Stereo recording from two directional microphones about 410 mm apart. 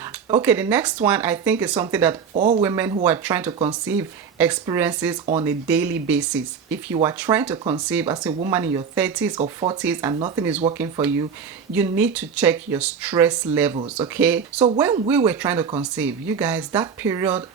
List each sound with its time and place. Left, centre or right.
0.3 s speech: centre
2.3 s speech: centre
2.6 s speech: centre